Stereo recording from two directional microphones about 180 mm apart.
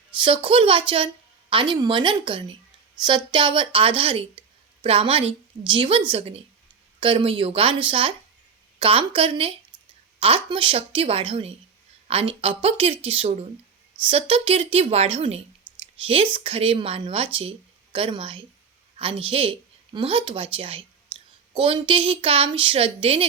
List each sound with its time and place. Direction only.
0.2 s a woman's voice: 30° right (ahead or behind)
15.7 s a sound: 10° right (ahead or behind)
16.0 s a woman's voice: 30° right (ahead or behind)